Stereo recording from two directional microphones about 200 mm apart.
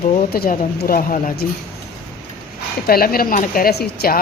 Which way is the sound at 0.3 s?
45° left (ahead or behind).